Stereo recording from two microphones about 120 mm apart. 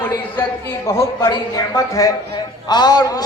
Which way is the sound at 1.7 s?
25° left (ahead or behind).